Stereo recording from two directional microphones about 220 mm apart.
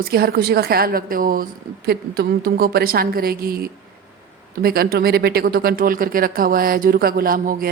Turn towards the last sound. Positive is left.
turn(degrees=-40)  # may be behind; listen again after turning